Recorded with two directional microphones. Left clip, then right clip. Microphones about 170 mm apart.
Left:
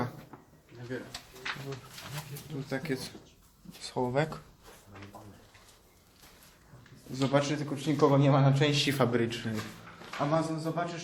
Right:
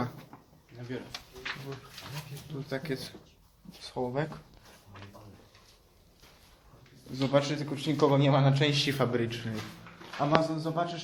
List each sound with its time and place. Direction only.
0.9 s speech: 40° right (ahead or behind)
2.6 s a man's voice: centre (ahead or behind)
3.8 s speech: 15° left (ahead or behind)
7.1 s a man's voice: 5° left (ahead or behind)
10.2 s a man's voice: 10° right (ahead or behind)